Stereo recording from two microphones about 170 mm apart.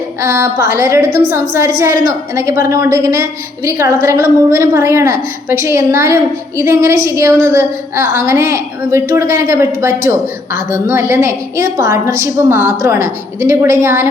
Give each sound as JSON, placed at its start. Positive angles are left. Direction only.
{"t": 0.2, "sound": "a woman's voice", "side_deg": -15}